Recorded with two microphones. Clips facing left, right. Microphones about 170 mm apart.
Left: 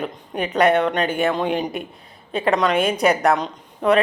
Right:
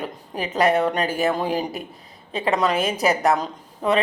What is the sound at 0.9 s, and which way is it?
Speech, 35° right (ahead or behind).